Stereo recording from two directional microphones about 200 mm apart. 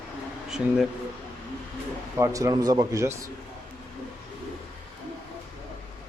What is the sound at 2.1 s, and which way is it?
A man's voice, 15° right (ahead or behind).